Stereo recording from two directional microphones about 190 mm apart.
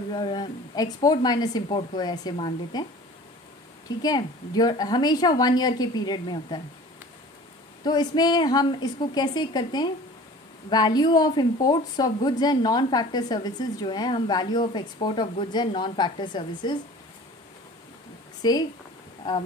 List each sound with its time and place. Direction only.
0.1 s a woman's voice: 25° left (ahead or behind)
4.0 s a woman's voice: 20° left (ahead or behind)
7.8 s a woman's voice: 20° left (ahead or behind)
18.4 s speech: 20° left (ahead or behind)